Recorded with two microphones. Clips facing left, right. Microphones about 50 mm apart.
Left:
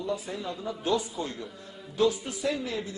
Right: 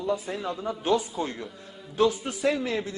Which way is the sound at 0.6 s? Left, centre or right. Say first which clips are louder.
Right 3 dB; right.